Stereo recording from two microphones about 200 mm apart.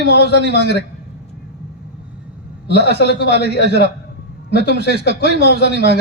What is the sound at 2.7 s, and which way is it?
A man's voice, 55° left (ahead or behind).